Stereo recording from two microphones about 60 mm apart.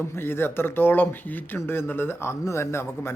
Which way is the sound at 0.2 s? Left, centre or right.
Left.